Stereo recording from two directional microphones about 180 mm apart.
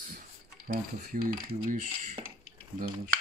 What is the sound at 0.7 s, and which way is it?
Cutlery, 55° right (ahead or behind).